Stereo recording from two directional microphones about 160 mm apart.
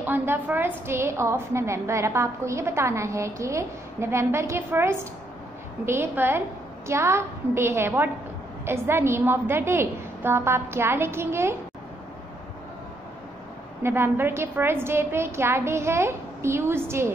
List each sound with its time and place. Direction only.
0.0 s a woman's voice: 10° right (ahead or behind)
13.8 s a woman's voice: 15° right (ahead or behind)